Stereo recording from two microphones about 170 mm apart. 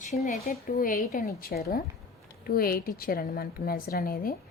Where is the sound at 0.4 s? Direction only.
55° left (ahead or behind).